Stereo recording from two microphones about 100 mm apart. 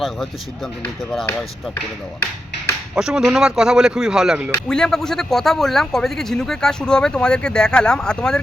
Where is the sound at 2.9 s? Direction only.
5° right (ahead or behind).